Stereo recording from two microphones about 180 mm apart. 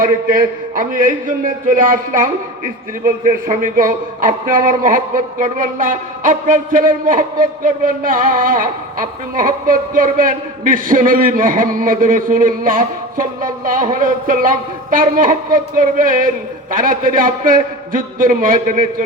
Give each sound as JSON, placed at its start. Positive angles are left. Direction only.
{"t": 0.0, "sound": "a man's voice", "side_deg": -50}